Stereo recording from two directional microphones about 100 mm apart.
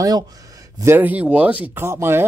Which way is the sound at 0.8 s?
20° right (ahead or behind).